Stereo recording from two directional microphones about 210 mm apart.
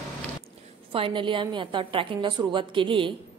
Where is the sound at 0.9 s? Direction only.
25° right (ahead or behind).